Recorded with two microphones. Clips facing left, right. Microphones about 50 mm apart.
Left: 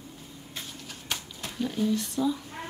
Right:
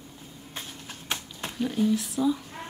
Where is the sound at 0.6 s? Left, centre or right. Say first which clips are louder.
Right 1 dB; right.